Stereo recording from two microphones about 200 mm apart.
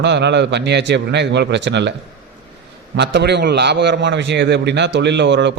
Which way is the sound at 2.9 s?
60° right (ahead or behind).